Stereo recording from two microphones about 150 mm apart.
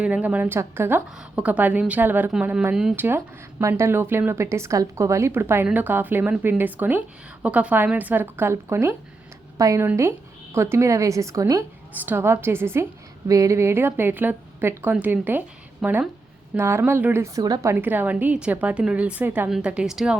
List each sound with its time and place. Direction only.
0.0 s a woman's voice: 10° right (ahead or behind)